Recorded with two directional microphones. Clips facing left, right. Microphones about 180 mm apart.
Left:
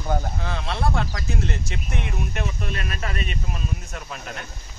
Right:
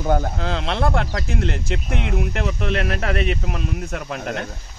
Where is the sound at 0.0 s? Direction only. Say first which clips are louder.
Right 6 dB; 55° right (ahead or behind).